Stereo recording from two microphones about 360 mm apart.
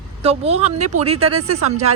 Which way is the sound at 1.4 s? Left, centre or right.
Right.